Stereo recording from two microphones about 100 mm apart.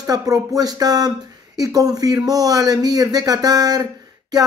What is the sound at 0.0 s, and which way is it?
A man's voice, 35° right (ahead or behind).